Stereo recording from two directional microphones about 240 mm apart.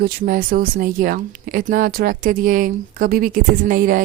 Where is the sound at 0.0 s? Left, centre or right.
Right.